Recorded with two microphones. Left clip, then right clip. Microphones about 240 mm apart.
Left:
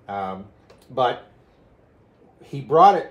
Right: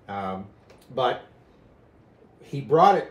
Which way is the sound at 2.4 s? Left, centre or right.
Centre.